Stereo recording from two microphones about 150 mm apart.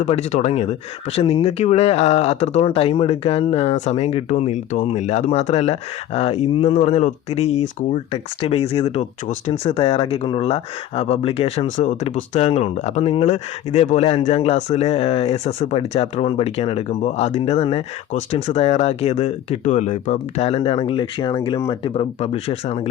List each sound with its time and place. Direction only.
0.0 s speech: 50° left (ahead or behind); by 21.9 s 25° left (ahead or behind)
21.9 s speech: 40° left (ahead or behind)